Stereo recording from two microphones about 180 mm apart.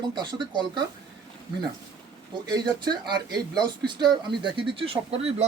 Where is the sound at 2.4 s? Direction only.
25° right (ahead or behind).